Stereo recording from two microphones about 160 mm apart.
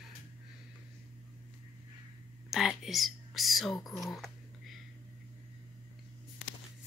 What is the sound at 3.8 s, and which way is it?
Speech, 20° left (ahead or behind).